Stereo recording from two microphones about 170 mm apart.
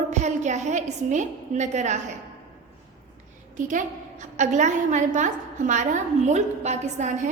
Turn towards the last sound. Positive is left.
turn(degrees=-45)  # may be behind; listen again after turning